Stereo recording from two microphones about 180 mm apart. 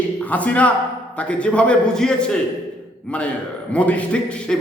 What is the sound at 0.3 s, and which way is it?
A man's voice, 10° left (ahead or behind).